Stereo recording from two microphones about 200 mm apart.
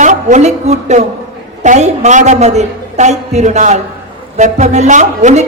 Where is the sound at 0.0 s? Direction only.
40° right (ahead or behind).